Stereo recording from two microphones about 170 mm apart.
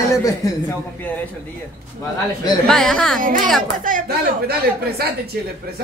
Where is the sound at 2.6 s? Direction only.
Centre (ahead or behind).